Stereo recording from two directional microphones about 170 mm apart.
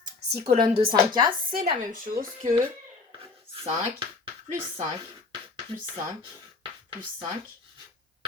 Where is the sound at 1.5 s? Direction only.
60° right (ahead or behind).